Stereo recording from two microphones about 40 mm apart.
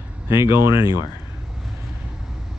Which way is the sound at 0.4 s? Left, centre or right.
Right.